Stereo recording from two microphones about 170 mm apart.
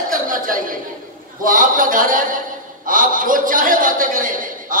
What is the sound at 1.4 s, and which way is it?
A man's voice, 55° right (ahead or behind).